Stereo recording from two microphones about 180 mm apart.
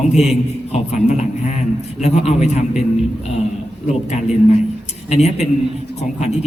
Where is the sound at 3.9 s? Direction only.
40° left (ahead or behind).